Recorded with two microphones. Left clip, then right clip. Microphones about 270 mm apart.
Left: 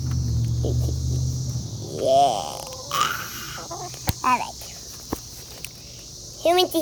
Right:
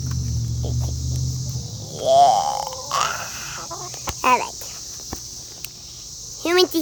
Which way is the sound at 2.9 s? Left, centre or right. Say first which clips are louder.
Even; centre.